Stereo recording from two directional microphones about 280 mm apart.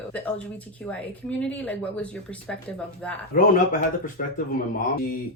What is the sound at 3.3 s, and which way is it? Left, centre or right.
Speech, left.